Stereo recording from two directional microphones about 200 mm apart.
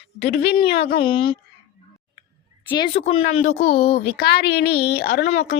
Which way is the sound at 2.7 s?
25° left (ahead or behind).